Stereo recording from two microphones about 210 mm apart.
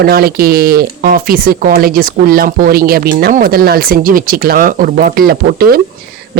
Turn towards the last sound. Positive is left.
turn(degrees=-45)  # may be behind; listen again after turning